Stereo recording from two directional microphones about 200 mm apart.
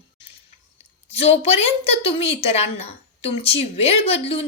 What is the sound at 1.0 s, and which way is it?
A woman's voice, 30° left (ahead or behind).